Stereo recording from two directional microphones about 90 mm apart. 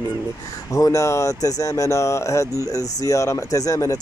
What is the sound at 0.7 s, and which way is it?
Speech, 35° left (ahead or behind).